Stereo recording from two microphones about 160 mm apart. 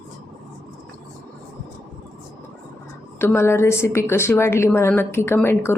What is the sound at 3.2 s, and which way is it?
A woman's voice, 15° left (ahead or behind).